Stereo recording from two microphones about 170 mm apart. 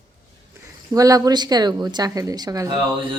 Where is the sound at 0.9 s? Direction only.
20° right (ahead or behind).